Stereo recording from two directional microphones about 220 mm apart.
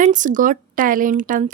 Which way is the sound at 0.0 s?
35° right (ahead or behind).